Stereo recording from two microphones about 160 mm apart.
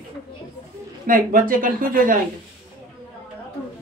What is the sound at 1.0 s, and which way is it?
Speech, 60° right (ahead or behind).